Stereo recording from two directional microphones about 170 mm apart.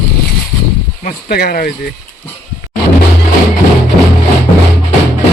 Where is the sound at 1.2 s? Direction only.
65° left (ahead or behind).